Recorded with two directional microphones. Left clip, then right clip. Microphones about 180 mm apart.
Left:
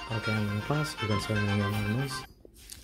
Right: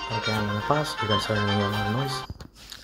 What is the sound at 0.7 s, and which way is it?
Speech, 15° left (ahead or behind).